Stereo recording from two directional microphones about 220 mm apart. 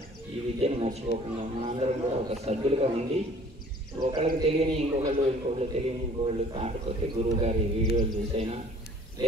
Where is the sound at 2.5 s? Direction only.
30° right (ahead or behind).